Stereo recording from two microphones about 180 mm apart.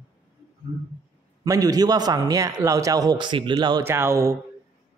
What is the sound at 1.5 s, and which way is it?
A man's voice, 20° right (ahead or behind).